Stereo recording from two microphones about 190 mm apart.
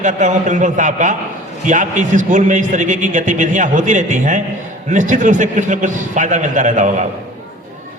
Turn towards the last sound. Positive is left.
turn(degrees=-40)  # may be behind; listen again after turning